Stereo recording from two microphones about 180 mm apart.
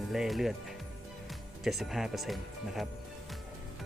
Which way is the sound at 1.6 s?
Centre (ahead or behind).